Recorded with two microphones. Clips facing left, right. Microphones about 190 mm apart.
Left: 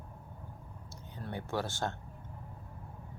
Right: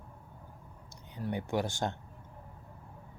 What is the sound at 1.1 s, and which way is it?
Speech, 15° right (ahead or behind).